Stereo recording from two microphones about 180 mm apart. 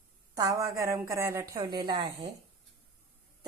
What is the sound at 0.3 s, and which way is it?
A woman's voice, 20° right (ahead or behind).